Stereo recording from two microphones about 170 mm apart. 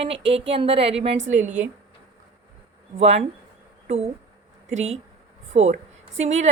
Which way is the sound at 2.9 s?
40° right (ahead or behind).